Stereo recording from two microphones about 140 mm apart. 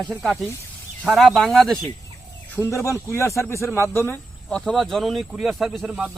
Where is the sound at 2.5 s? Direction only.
15° left (ahead or behind).